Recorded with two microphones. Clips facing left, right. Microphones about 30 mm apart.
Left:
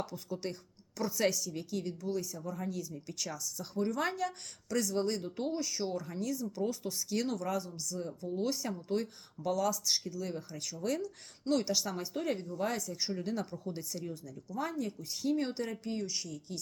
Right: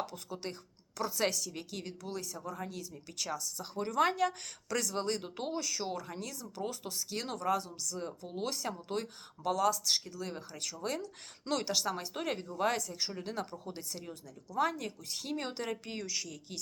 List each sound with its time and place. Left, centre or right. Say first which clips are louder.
0.0 s speech: left 1 dB; right
0.9 s a woman's voice: left 1 dB; right
1.3 s a woman's voice: left 3 dB; right
5.5 s speech: left 1 dB; right
6.4 s a woman's voice: left 4 dB; right
6.9 s a woman's voice: left 4 dB; right
7.3 s a woman's voice: right 2 dB; right
8.2 s a woman's voice: left 4 dB; right
12.9 s a woman's voice: left 3 dB; right
14.3 s speech: right 8 dB; right
15.0 s a woman's voice: left 6 dB; right
15.8 s a woman's voice: left 2 dB; right